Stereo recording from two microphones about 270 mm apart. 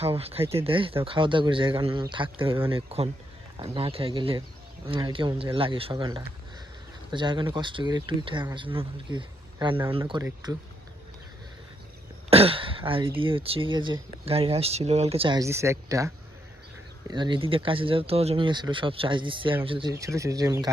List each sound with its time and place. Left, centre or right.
0.0 s speech: right
12.3 s speech: right